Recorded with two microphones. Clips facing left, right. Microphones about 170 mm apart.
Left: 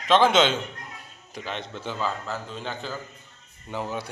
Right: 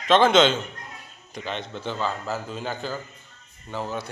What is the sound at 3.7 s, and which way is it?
Speech, 15° left (ahead or behind).